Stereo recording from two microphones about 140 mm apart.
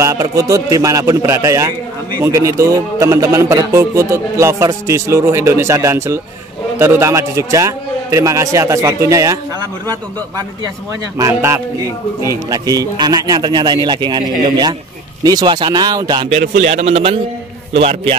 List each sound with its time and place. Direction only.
0.0 s a man's voice: 25° right (ahead or behind)
16.3 s a man's voice: 50° right (ahead or behind)